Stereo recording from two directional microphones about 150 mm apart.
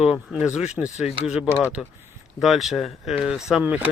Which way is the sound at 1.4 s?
20° left (ahead or behind).